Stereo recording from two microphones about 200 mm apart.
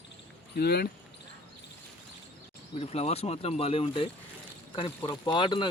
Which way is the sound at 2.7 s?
30° left (ahead or behind).